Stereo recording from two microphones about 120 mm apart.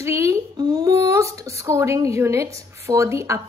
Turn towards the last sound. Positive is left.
turn(degrees=-25)  # may be behind; listen again after turning